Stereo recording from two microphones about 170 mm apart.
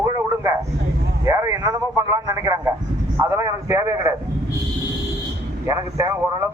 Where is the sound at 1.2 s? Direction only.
15° right (ahead or behind).